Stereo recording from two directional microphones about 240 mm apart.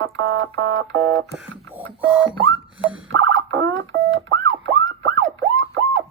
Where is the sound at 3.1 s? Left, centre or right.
Right.